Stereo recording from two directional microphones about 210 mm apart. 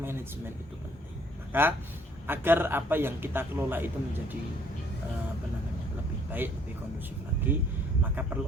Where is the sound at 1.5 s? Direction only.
10° right (ahead or behind).